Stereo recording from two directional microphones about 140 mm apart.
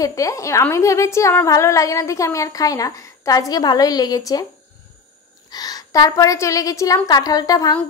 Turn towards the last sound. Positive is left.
turn(degrees=25)  # may be behind; listen again after turning